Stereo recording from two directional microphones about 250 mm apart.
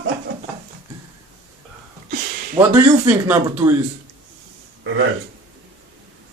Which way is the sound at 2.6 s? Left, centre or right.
Centre.